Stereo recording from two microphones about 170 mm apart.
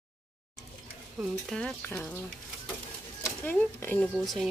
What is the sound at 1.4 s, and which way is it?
Speech, 5° left (ahead or behind).